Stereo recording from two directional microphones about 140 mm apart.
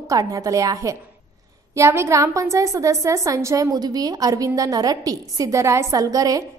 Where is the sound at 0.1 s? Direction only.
25° right (ahead or behind).